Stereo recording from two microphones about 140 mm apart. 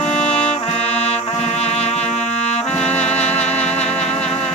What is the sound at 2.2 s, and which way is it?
Brass instrument, 55° left (ahead or behind).